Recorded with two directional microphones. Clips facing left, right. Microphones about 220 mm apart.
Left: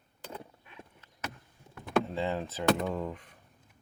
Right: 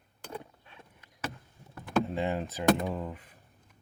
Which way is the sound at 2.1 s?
15° right (ahead or behind).